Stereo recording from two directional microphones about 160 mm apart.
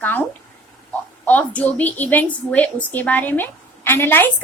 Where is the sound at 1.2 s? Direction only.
10° left (ahead or behind).